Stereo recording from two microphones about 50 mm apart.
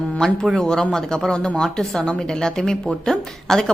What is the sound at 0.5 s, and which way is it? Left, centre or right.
A woman's voice, centre.